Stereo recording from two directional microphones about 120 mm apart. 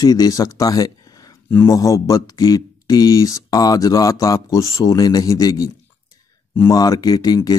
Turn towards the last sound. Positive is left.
turn(degrees=35)  # may be behind; listen again after turning